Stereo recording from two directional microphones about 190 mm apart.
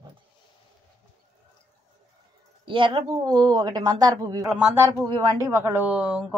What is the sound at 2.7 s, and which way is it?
A woman's voice, 25° right (ahead or behind).